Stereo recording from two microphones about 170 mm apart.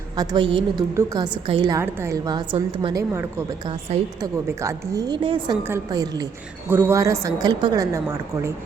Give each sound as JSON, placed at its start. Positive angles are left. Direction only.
{"t": 0.2, "sound": "a woman's voice", "side_deg": -25}
{"t": 1.8, "sound": "a woman's voice", "side_deg": -15}
{"t": 3.1, "sound": "a woman's voice", "side_deg": -15}